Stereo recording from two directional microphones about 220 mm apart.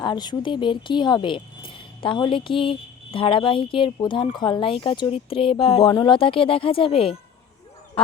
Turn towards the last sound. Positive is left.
turn(degrees=25)  # may be behind; listen again after turning